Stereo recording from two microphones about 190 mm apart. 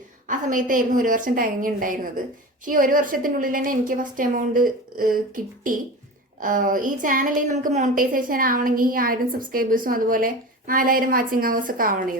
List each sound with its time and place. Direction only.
0.3 s a woman's voice: 45° right (ahead or behind)